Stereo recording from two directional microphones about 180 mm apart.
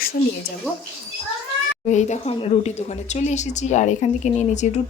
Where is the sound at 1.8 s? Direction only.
40° left (ahead or behind).